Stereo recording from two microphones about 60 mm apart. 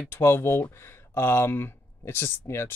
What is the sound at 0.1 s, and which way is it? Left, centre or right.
Speech, left.